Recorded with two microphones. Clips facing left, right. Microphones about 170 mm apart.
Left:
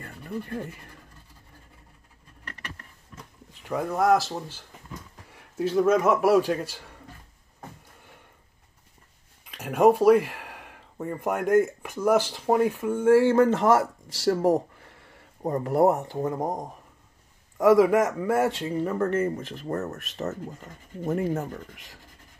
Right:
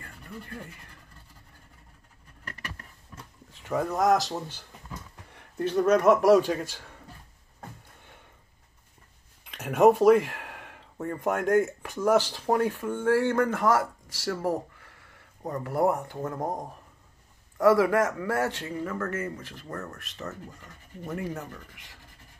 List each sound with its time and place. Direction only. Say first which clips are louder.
0.0 s rub: left 8 dB; 55° left (ahead or behind)
3.6 s a man's voice: left 1 dB; 5° left (ahead or behind)
9.5 s speech: even; 5° left (ahead or behind)
13.4 s speech: left 4 dB; 25° left (ahead or behind)
14.3 s speech: left 6 dB; 35° left (ahead or behind); by 18.9 s 20° left (ahead or behind)
19.7 s speech: left 8 dB; 40° left (ahead or behind)